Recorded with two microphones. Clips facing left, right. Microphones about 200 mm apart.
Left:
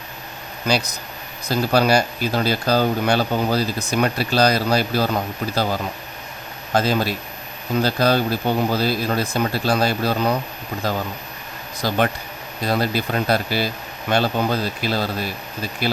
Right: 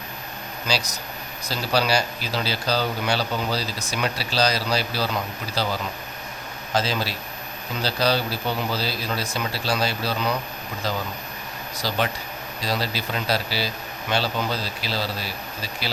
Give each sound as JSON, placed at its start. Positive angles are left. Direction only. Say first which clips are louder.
{"t": 0.7, "sound": "speech", "louder": "left 6 dB", "side_deg": 55}